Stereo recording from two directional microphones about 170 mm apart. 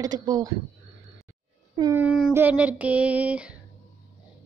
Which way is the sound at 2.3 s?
10° right (ahead or behind).